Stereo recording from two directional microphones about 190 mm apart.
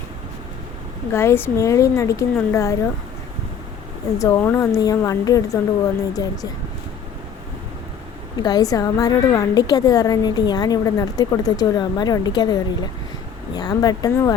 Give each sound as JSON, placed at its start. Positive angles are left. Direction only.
{"t": 1.1, "sound": "a woman's voice", "side_deg": 15}
{"t": 4.2, "sound": "a woman's voice", "side_deg": 15}
{"t": 8.4, "sound": "a woman's voice", "side_deg": 20}